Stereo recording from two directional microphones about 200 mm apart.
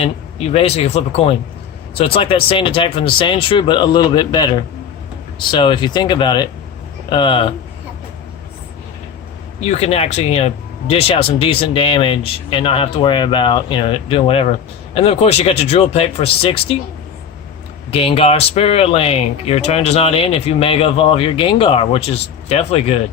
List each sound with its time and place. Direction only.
0.5 s speech: 30° left (ahead or behind)
9.6 s speech: 30° left (ahead or behind)
17.9 s speech: 30° left (ahead or behind)